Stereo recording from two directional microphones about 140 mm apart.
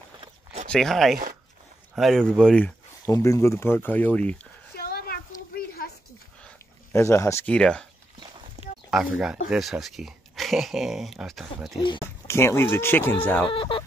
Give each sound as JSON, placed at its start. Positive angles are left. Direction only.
{"t": 0.7, "sound": "speech", "side_deg": 5}
{"t": 3.1, "sound": "speech", "side_deg": 20}
{"t": 4.7, "sound": "a sound", "side_deg": 90}
{"t": 6.9, "sound": "speech", "side_deg": 20}
{"t": 7.4, "sound": "speech", "side_deg": 10}
{"t": 8.6, "sound": "a sound", "side_deg": -55}
{"t": 8.9, "sound": "speech", "side_deg": -5}
{"t": 12.3, "sound": "speech", "side_deg": 20}
{"t": 13.5, "sound": "speech", "side_deg": 40}